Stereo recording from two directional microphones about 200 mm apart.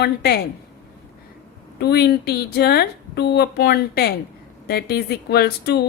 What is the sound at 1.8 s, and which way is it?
Speech, 55° left (ahead or behind).